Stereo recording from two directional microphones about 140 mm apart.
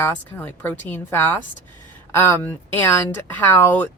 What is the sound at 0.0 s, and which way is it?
Speech, 15° left (ahead or behind).